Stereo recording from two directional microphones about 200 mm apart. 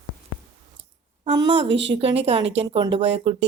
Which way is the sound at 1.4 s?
60° right (ahead or behind).